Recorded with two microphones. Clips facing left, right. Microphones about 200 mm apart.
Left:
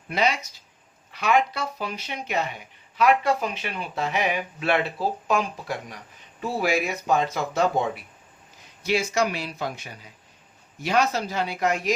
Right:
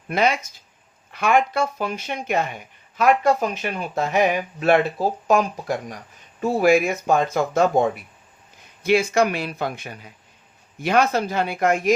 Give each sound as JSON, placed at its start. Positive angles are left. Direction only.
{"t": 0.1, "sound": "speech", "side_deg": -50}